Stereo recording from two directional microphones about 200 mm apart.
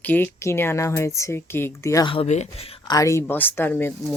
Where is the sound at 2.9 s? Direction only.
15° left (ahead or behind).